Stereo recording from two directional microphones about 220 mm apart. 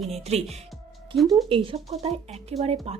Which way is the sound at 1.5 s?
25° right (ahead or behind).